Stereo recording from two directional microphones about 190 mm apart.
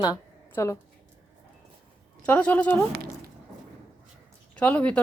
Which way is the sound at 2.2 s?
10° left (ahead or behind).